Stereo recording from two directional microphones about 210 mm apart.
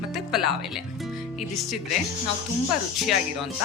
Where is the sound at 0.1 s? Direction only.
Centre (ahead or behind).